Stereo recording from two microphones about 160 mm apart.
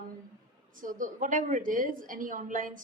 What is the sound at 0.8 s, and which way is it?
A woman's voice, 55° right (ahead or behind).